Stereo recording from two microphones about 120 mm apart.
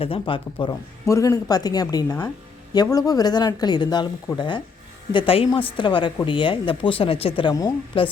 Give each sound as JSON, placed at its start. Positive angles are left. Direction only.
{"t": 0.0, "sound": "speech", "side_deg": 50}
{"t": 0.7, "sound": "a woman's voice", "side_deg": 25}